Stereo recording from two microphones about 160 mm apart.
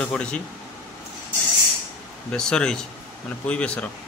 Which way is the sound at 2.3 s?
5° left (ahead or behind).